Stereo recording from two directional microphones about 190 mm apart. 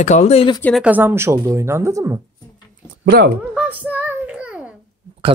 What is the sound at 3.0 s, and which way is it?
Speech, 55° right (ahead or behind).